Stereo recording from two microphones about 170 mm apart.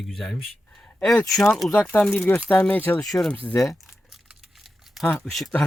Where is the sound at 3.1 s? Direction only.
5° left (ahead or behind).